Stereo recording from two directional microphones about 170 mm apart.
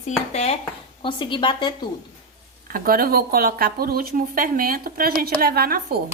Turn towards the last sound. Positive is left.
turn(degrees=-65)  # may be behind; listen again after turning